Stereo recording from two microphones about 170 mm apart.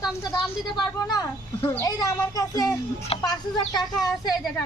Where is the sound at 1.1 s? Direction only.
15° left (ahead or behind).